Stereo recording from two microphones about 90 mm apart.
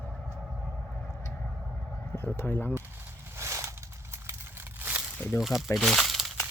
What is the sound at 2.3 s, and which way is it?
Speech, 25° left (ahead or behind).